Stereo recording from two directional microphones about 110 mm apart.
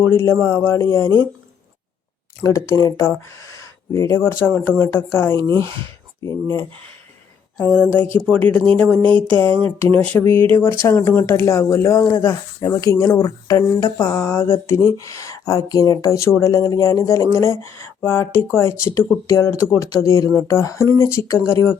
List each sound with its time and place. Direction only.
0.0 s speech: 20° left (ahead or behind)
2.4 s speech: 25° left (ahead or behind)
5.4 s speech: 45° right (ahead or behind)
7.5 s speech: 10° left (ahead or behind)